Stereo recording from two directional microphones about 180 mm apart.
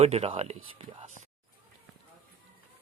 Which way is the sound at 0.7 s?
35° right (ahead or behind).